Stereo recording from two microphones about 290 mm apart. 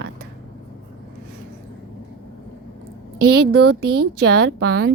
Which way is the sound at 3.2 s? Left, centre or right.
Right.